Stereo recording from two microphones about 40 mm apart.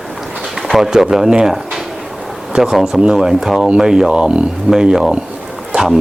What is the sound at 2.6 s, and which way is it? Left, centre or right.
A man's voice, centre.